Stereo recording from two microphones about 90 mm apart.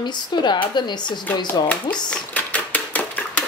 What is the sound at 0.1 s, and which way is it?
A woman's voice, 55° left (ahead or behind).